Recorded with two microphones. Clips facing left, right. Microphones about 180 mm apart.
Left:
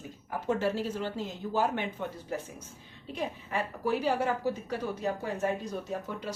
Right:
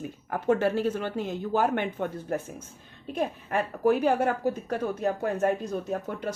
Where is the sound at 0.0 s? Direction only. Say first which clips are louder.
Right 6 dB; 60° right (ahead or behind).